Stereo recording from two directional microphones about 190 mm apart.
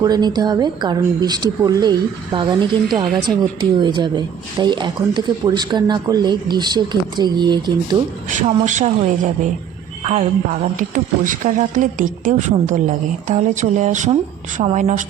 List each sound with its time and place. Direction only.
0.0 s speech: 20° right (ahead or behind)
8.3 s a woman's voice: 40° right (ahead or behind)